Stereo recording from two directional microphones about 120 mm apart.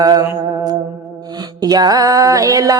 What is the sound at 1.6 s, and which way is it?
Mantra, 35° right (ahead or behind).